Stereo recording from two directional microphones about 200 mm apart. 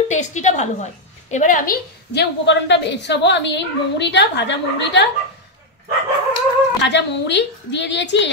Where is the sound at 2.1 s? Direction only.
60° left (ahead or behind).